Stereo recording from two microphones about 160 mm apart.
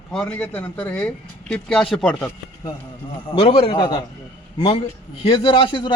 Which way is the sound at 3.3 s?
35° left (ahead or behind).